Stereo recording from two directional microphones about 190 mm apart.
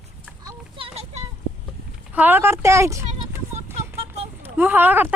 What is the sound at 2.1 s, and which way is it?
Speech, 10° right (ahead or behind).